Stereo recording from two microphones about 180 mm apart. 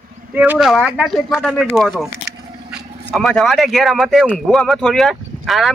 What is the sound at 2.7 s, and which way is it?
Speech, centre (ahead or behind).